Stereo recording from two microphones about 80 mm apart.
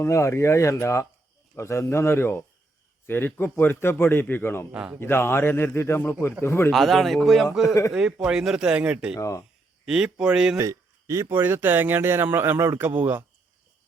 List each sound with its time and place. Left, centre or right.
0.0 s a man's voice: left
4.7 s speech: centre
4.9 s a man's voice: left
6.7 s speech: centre
7.6 s speech: left
7.9 s speech: centre
10.6 s a sound: right
11.3 s speech: right